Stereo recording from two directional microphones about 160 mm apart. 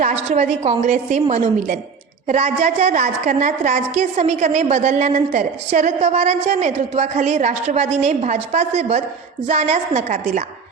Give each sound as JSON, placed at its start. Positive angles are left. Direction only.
{"t": 0.0, "sound": "a woman's voice", "side_deg": -45}